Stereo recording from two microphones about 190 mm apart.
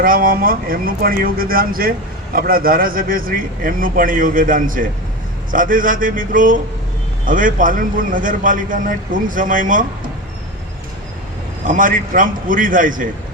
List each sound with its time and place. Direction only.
0.0 s a man's voice: 50° right (ahead or behind)
11.6 s a man's voice: 45° right (ahead or behind)